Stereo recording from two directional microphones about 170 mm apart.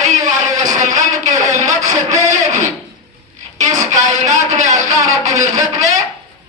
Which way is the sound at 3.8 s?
45° right (ahead or behind).